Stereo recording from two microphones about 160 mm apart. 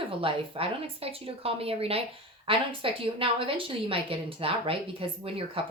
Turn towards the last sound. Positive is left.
turn(degrees=-35)  # may be behind; listen again after turning